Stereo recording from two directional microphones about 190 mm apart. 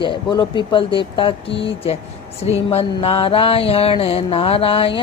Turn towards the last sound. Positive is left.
turn(degrees=30)  # may be behind; listen again after turning